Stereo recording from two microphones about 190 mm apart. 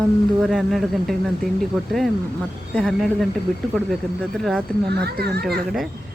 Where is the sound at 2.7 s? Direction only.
Centre (ahead or behind).